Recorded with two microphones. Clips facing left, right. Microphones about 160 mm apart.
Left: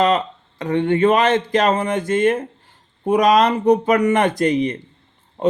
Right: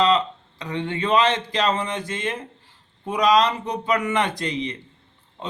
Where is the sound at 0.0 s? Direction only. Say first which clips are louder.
Left 2 dB; 50° left (ahead or behind).